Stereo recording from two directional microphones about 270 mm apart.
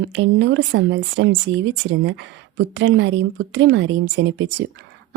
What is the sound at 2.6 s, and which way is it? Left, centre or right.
A woman's voice, right.